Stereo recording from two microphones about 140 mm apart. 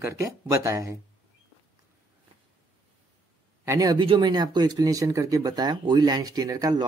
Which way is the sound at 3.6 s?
25° right (ahead or behind).